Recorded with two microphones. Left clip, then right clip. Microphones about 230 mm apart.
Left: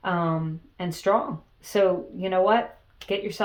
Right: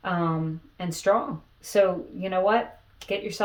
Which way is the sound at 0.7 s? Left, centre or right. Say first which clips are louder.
Even; left.